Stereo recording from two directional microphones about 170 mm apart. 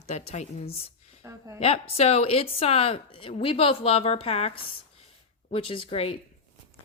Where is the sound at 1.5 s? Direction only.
35° left (ahead or behind).